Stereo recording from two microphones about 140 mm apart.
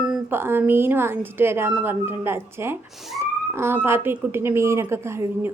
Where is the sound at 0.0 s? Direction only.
5° right (ahead or behind).